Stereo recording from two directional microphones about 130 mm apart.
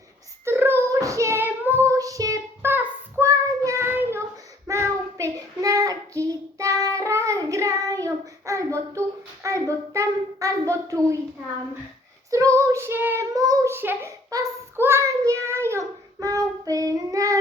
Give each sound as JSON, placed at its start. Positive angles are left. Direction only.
{"t": 0.4, "sound": "child singing", "side_deg": -15}
{"t": 12.3, "sound": "child singing", "side_deg": -25}
{"t": 13.3, "sound": "child singing", "side_deg": -30}